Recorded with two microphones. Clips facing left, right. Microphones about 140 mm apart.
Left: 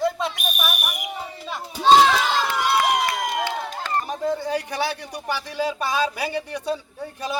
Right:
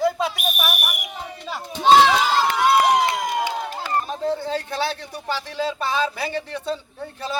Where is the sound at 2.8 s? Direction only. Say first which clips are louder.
Right 3 dB; 25° right (ahead or behind).